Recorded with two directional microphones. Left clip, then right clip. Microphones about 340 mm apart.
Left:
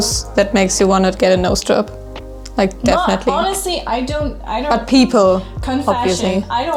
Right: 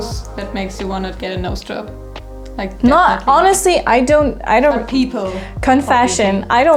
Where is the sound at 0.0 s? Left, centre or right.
Left.